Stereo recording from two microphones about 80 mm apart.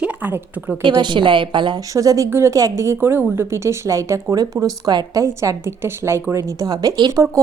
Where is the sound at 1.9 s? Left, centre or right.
Right.